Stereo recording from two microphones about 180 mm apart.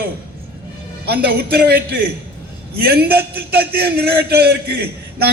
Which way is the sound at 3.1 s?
60° right (ahead or behind).